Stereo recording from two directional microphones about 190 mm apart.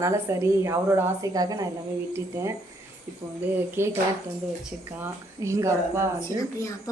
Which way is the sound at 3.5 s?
10° right (ahead or behind).